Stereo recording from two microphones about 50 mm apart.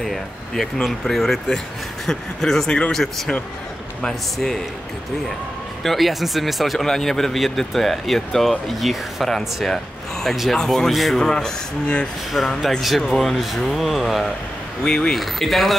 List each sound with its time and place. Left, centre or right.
0.0 s speech: centre
4.4 s speech: centre
5.9 s speech: centre
11.1 s speech: centre
12.8 s speech: centre
14.9 s speech: centre
15.1 s speech: centre